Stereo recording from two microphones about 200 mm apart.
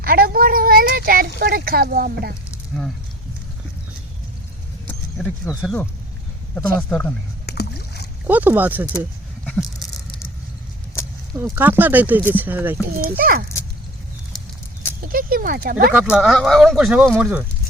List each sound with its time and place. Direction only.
0.0 s a woman's voice: 50° right (ahead or behind)
4.9 s a sound: 5° left (ahead or behind)
6.5 s speech: 10° left (ahead or behind)
7.4 s rowboat: 55° left (ahead or behind)
8.3 s speech: 10° right (ahead or behind)
11.3 s speech: 10° right (ahead or behind)
12.8 s speech: 50° right (ahead or behind)
15.0 s speech: 45° right (ahead or behind)
15.9 s speech: 5° right (ahead or behind)